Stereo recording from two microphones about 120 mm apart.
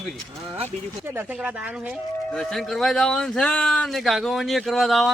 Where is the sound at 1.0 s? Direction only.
20° right (ahead or behind).